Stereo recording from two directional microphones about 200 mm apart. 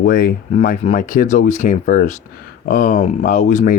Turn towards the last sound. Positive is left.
turn(degrees=40)  # may be behind; listen again after turning